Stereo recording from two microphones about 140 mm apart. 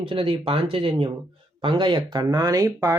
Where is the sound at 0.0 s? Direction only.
40° right (ahead or behind).